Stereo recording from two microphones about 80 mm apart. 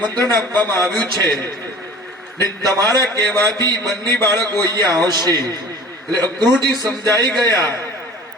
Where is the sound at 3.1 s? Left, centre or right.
Left.